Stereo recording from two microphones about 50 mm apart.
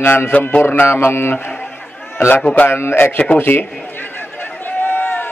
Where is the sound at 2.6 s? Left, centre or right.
Left.